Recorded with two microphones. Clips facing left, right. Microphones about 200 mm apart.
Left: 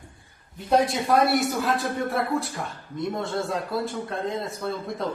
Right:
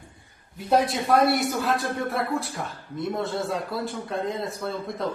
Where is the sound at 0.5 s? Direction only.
Centre (ahead or behind).